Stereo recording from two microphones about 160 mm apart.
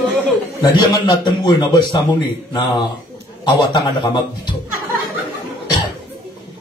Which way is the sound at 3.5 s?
30° left (ahead or behind).